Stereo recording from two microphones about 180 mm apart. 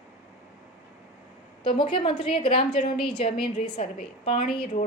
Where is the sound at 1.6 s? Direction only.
30° left (ahead or behind).